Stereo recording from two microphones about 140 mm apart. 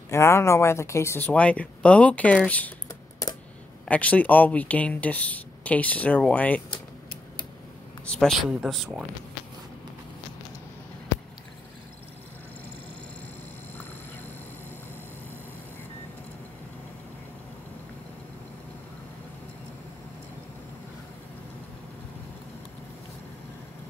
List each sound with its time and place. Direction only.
0.1 s speech: 20° left (ahead or behind)
3.2 s typing: 25° left (ahead or behind)
3.8 s speech: 10° left (ahead or behind)
8.0 s speech: 5° left (ahead or behind)